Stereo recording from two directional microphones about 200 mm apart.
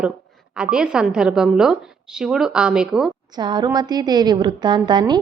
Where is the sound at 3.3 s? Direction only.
20° right (ahead or behind).